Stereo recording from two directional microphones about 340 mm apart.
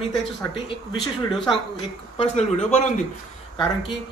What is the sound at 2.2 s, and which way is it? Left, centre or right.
Speech, centre.